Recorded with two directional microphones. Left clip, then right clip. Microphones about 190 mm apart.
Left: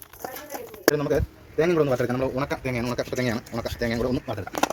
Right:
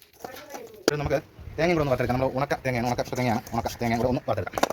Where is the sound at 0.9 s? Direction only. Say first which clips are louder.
Left 2 dB; 35° right (ahead or behind).